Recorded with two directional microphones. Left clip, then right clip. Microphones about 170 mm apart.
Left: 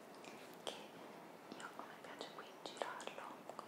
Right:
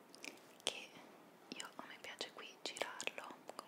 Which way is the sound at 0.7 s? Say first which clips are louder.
Right 6 dB; 45° right (ahead or behind).